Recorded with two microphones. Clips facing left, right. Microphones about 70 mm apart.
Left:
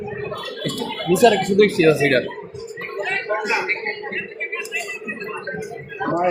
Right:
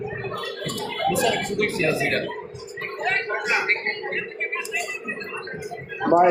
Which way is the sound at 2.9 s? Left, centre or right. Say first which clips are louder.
Left 2 dB; centre.